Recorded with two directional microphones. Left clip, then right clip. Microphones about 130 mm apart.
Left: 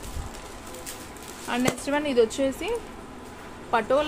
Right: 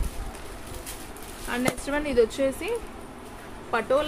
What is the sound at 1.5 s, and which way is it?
Speech, 45° left (ahead or behind).